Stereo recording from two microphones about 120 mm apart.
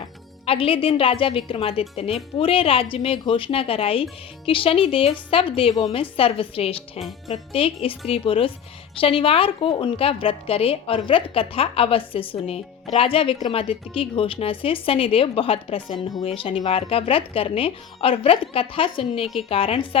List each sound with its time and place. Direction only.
0.4 s a woman's voice: 50° left (ahead or behind)